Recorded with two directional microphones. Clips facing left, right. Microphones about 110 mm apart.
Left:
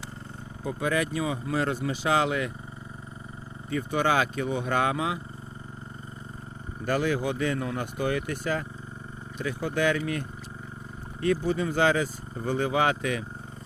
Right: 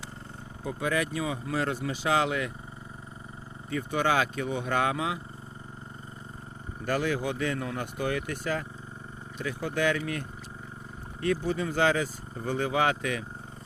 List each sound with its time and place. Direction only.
0.6 s speech: 35° left (ahead or behind)
3.7 s speech: 30° left (ahead or behind)
6.8 s speech: 20° left (ahead or behind)
11.3 s speech: 20° left (ahead or behind)